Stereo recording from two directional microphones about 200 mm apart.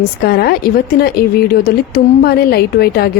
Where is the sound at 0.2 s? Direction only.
50° left (ahead or behind).